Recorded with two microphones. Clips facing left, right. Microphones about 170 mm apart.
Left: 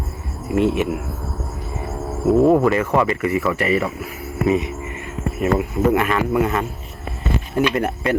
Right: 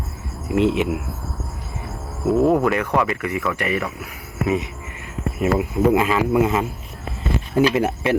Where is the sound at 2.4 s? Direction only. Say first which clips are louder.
Left 2 dB; centre (ahead or behind).